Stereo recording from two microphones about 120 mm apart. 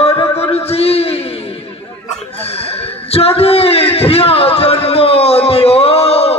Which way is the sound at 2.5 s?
55° left (ahead or behind).